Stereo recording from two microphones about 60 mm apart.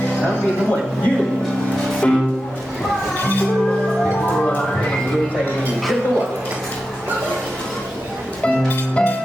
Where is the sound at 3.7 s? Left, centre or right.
Centre.